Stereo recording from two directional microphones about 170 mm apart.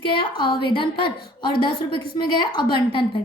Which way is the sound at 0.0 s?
30° left (ahead or behind).